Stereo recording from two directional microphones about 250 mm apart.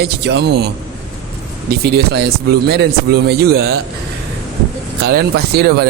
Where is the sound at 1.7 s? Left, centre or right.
Right.